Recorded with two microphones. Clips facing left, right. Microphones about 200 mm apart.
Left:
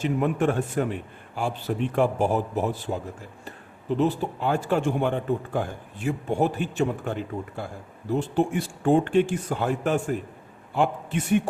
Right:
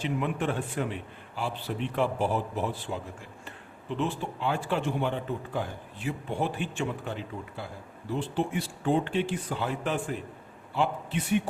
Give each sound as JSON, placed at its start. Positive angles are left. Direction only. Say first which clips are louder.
{"t": 0.0, "sound": "speech", "louder": "left 6 dB", "side_deg": 45}